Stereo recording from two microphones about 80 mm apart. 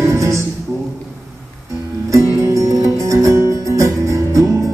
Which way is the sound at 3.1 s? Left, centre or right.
Right.